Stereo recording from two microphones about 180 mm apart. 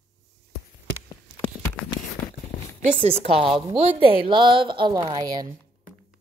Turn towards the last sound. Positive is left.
turn(degrees=-20)  # may be behind; listen again after turning